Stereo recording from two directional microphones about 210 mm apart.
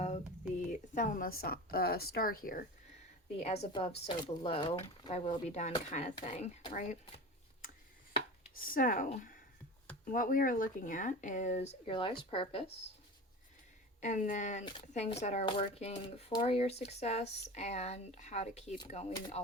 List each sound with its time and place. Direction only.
0.9 s a woman's voice: 40° left (ahead or behind)
3.3 s speech: 30° left (ahead or behind)
8.5 s speech: 40° left (ahead or behind)
11.9 s speech: 25° left (ahead or behind)
14.0 s speech: 35° left (ahead or behind)